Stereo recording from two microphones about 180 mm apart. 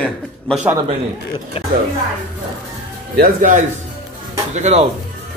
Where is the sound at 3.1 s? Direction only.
50° right (ahead or behind).